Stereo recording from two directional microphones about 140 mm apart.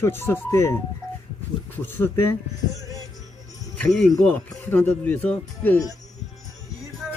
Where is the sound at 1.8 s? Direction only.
15° left (ahead or behind).